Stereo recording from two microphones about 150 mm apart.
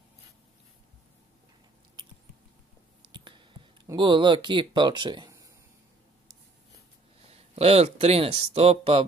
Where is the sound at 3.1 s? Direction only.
35° right (ahead or behind).